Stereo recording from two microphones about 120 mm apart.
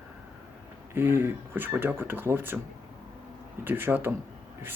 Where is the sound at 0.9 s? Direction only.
20° right (ahead or behind).